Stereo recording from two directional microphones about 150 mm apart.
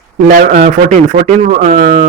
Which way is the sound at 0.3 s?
65° right (ahead or behind).